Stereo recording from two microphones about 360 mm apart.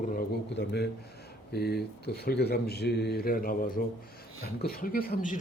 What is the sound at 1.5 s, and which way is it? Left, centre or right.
Speech, left.